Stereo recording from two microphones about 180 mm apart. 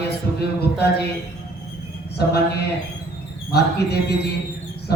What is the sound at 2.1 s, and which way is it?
Speech, 65° left (ahead or behind).